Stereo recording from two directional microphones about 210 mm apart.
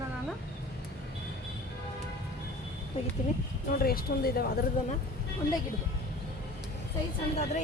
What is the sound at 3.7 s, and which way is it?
Speech, 45° left (ahead or behind).